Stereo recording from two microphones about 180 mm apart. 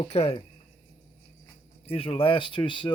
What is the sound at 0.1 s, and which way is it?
Speech, 35° left (ahead or behind).